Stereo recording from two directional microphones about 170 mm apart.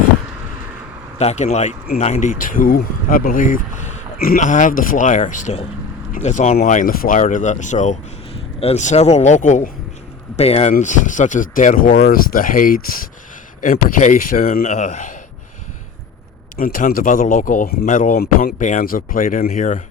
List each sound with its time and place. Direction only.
1.2 s speech: 40° left (ahead or behind); by 14.6 s 55° left (ahead or behind)
14.6 s speech: 45° left (ahead or behind)
16.6 s speech: 55° left (ahead or behind)